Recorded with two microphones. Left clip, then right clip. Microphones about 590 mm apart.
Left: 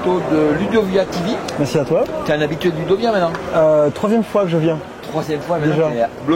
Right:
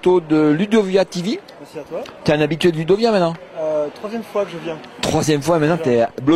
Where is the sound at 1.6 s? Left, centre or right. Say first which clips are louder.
Left 19 dB; left.